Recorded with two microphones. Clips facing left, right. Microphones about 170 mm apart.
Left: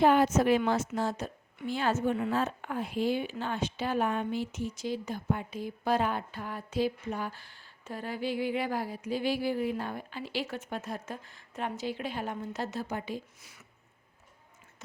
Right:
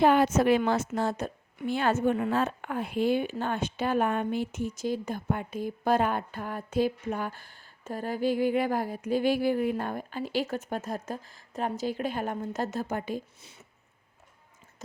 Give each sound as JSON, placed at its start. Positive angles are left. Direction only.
{"t": 0.0, "sound": "a woman's voice", "side_deg": -70}
{"t": 13.4, "sound": "speech", "side_deg": -25}